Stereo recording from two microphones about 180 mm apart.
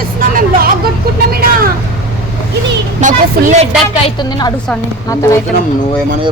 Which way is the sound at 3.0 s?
40° right (ahead or behind).